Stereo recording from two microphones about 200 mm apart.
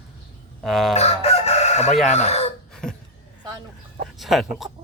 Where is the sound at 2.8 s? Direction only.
5° left (ahead or behind).